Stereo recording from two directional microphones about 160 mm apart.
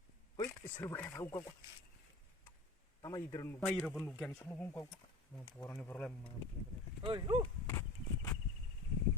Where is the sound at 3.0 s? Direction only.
25° left (ahead or behind).